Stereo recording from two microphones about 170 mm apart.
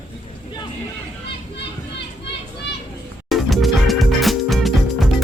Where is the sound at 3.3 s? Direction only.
Centre (ahead or behind).